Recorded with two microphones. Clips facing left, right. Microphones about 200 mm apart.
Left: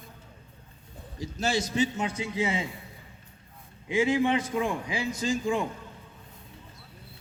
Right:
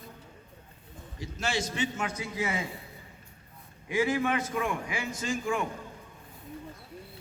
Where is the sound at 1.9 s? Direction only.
20° left (ahead or behind).